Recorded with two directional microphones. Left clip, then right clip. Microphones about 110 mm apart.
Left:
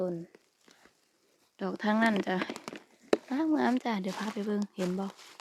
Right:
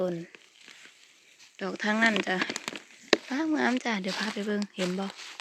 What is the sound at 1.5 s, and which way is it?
Speech, 30° left (ahead or behind).